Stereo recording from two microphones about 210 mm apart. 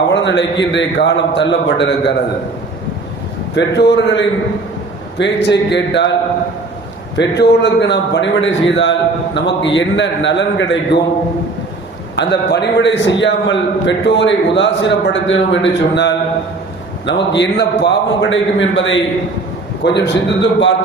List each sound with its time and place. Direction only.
0.1 s a man's voice: 60° left (ahead or behind)
3.5 s a man's voice: 55° left (ahead or behind)
7.2 s a man's voice: 55° left (ahead or behind)
12.1 s a man's voice: 55° left (ahead or behind)